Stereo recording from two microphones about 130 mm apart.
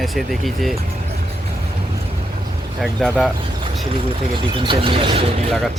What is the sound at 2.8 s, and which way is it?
Speech, centre (ahead or behind).